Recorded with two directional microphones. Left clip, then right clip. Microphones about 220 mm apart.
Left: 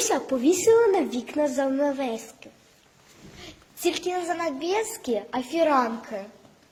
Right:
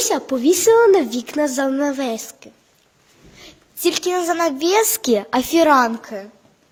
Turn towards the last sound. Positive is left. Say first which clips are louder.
# right 8 dB
turn(degrees=-40)  # may be behind; listen again after turning